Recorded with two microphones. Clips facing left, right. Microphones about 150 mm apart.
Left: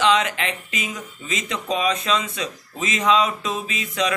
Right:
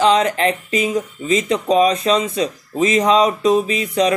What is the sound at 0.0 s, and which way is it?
Speech, 40° right (ahead or behind).